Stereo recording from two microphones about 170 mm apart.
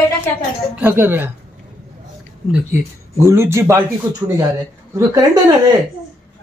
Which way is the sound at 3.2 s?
15° right (ahead or behind).